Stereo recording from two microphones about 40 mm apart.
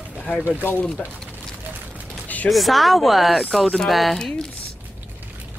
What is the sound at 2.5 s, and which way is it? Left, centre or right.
Speech, centre.